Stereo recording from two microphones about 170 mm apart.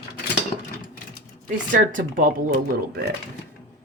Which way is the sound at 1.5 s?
50° right (ahead or behind).